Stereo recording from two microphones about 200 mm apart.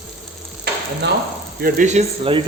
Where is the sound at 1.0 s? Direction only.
60° right (ahead or behind).